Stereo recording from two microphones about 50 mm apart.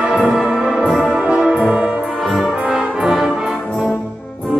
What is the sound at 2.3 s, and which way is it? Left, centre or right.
Brass instrument, centre.